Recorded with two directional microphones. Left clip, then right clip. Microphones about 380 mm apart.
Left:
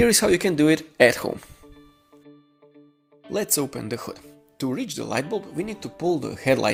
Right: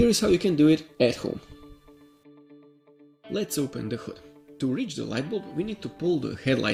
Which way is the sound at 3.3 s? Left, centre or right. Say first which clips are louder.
Left 4 dB; centre.